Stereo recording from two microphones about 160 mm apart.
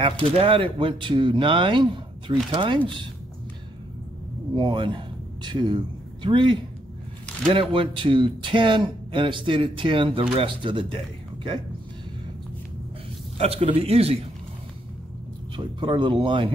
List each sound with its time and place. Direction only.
0.0 s speech: 35° right (ahead or behind)
4.6 s a man's voice: 30° right (ahead or behind)
7.7 s speech: 30° right (ahead or behind)
13.4 s speech: 40° right (ahead or behind)
15.5 s speech: 30° right (ahead or behind)